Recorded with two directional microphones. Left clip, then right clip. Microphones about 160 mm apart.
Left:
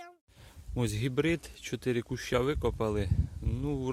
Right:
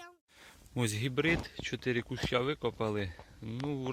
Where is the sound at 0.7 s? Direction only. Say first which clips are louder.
Left 1 dB; centre (ahead or behind).